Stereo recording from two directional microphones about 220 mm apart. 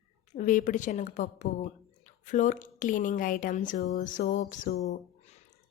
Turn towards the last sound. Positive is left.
turn(degrees=30)  # may be behind; listen again after turning